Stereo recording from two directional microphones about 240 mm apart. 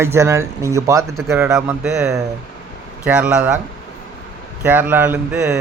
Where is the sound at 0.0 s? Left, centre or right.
Centre.